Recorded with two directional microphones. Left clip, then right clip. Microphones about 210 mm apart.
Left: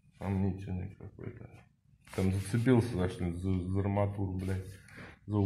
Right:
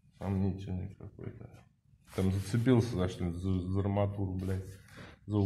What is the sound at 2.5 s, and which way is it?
Speech, centre (ahead or behind).